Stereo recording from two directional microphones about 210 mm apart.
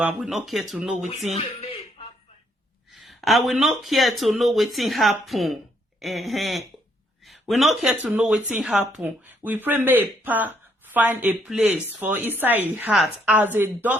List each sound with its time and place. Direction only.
0.0 s speech: centre (ahead or behind)
1.4 s a sound: 25° left (ahead or behind)
2.9 s a woman's voice: centre (ahead or behind)